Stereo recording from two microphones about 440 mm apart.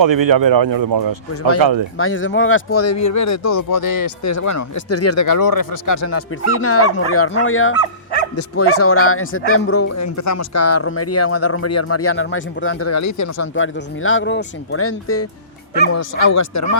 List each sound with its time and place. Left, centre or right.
0.0 s speech: right
2.0 s speech: left